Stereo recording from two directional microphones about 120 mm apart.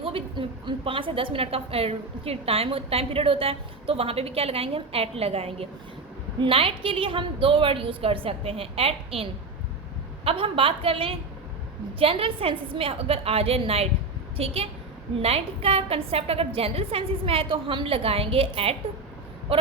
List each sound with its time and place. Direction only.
0.0 s a woman's voice: 45° right (ahead or behind)